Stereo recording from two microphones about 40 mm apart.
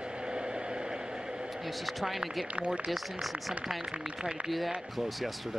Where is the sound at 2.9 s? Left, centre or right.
Centre.